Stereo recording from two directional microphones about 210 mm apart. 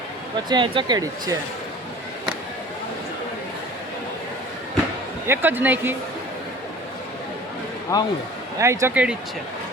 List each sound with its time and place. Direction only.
0.4 s speech: 20° right (ahead or behind)
5.2 s speech: 10° right (ahead or behind)
7.9 s speech: 15° left (ahead or behind)
8.5 s speech: 15° right (ahead or behind)